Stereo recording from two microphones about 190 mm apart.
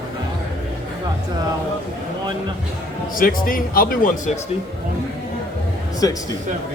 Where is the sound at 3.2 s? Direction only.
50° left (ahead or behind).